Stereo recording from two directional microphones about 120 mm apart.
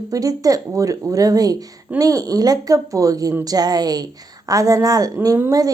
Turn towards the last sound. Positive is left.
turn(degrees=-25)  # may be behind; listen again after turning